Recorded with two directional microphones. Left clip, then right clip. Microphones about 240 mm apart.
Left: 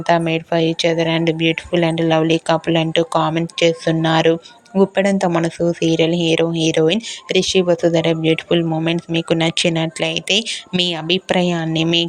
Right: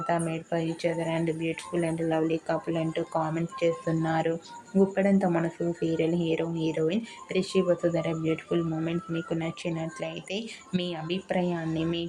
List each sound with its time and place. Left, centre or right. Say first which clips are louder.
0.1 s speech: left 14 dB; left